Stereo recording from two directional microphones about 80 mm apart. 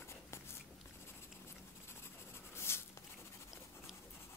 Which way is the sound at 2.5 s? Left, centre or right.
Left.